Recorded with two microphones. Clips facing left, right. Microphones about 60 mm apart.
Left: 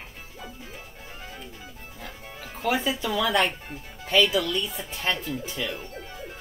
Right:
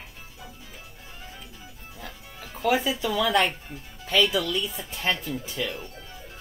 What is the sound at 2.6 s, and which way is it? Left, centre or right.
Speech, centre.